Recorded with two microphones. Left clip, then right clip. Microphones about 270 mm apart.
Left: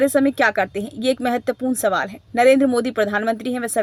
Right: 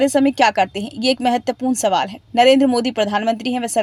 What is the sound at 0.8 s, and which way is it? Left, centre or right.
Speech, right.